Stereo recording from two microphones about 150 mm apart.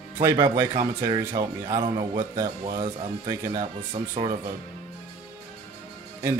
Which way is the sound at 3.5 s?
40° right (ahead or behind).